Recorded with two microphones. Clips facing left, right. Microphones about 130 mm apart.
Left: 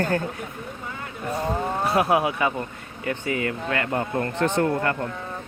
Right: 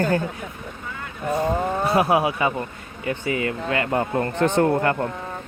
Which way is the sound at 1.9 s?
5° right (ahead or behind).